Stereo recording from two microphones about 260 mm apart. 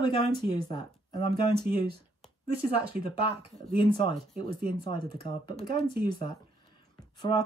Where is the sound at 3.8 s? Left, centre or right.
Centre.